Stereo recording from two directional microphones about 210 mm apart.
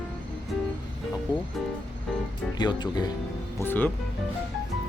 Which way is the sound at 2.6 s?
20° left (ahead or behind).